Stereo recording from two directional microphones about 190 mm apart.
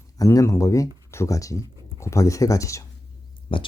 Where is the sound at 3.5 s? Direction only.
25° left (ahead or behind).